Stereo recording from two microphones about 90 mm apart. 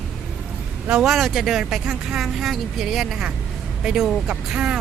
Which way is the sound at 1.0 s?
Centre (ahead or behind).